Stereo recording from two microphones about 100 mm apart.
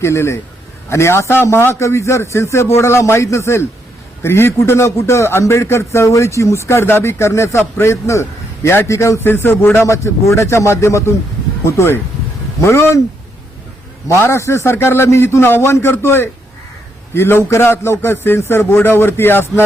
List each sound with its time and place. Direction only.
0.0 s a man's voice: 25° left (ahead or behind)
14.1 s a man's voice: 25° left (ahead or behind)